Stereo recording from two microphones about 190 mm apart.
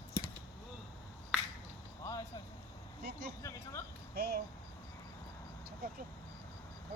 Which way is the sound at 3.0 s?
60° right (ahead or behind).